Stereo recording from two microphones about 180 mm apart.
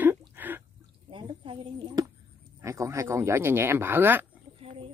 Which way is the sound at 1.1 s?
30° right (ahead or behind).